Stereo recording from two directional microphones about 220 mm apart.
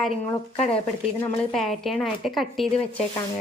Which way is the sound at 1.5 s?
Centre (ahead or behind).